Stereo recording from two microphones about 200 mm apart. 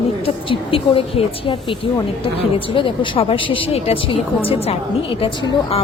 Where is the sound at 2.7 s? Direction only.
25° left (ahead or behind).